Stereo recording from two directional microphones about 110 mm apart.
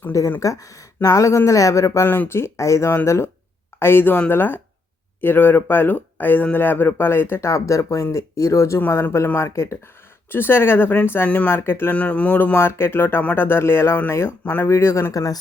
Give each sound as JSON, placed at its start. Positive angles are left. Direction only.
{"t": 0.1, "sound": "speech", "side_deg": 30}